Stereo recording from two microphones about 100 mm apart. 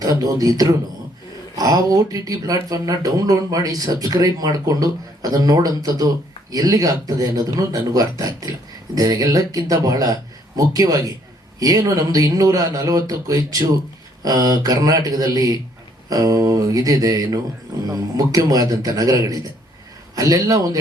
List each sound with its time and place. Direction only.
0.0 s speech: 40° right (ahead or behind)